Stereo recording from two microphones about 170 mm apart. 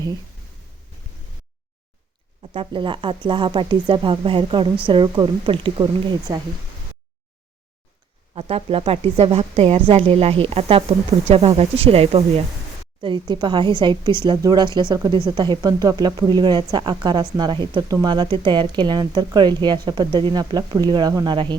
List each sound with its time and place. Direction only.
2.5 s speech: 30° right (ahead or behind)
8.4 s a woman's voice: 35° right (ahead or behind)